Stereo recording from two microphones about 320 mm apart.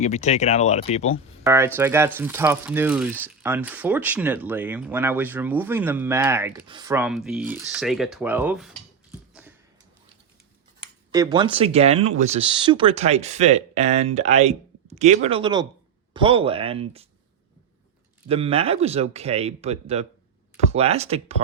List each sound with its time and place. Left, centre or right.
0.0 s speech: left
1.5 s speech: centre
9.3 s a sound: centre
11.1 s speech: centre
18.3 s speech: centre